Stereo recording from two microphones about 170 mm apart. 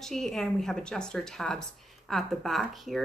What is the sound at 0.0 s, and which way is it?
Speech, centre (ahead or behind).